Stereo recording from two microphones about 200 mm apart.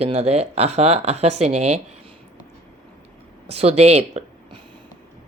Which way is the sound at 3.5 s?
30° right (ahead or behind).